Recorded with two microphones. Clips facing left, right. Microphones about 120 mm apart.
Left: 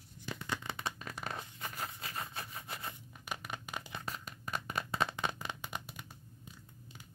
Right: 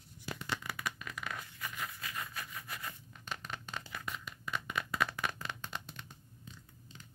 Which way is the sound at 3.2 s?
15° left (ahead or behind).